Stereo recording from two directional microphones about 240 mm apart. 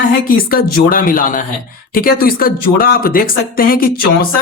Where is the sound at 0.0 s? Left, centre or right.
Left.